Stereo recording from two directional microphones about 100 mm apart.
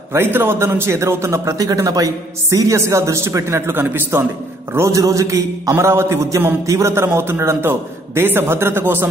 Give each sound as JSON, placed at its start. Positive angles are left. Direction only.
{"t": 0.1, "sound": "a man's voice", "side_deg": -25}